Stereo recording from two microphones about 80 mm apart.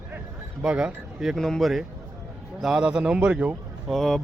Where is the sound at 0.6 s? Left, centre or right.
Centre.